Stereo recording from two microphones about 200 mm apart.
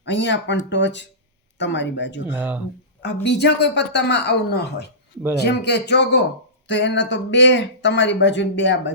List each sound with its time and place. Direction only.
0.0 s speech: 65° left (ahead or behind)
2.3 s speech: 10° right (ahead or behind)
3.0 s speech: 60° left (ahead or behind)